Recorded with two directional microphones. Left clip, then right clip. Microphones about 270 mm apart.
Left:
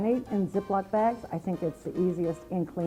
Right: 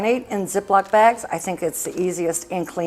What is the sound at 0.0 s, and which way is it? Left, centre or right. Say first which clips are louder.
Speech: right 8 dB; centre.